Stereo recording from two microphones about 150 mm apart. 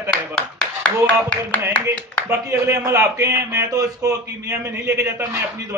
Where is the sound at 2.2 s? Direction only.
20° right (ahead or behind).